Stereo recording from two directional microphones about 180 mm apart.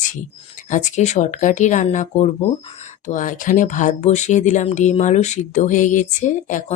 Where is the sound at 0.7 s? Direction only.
45° left (ahead or behind).